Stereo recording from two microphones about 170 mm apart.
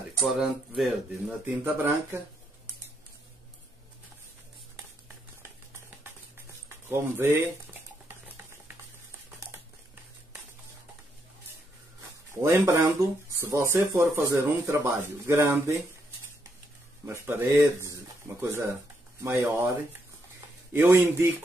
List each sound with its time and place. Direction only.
0.2 s speech: centre (ahead or behind)
1.4 s speech: 15° right (ahead or behind)
6.9 s speech: 15° right (ahead or behind)
12.4 s speech: 15° right (ahead or behind)
17.0 s speech: 15° right (ahead or behind)
20.7 s speech: 15° right (ahead or behind)